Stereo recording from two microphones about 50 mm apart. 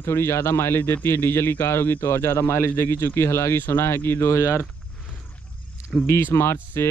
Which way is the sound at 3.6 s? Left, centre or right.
Left.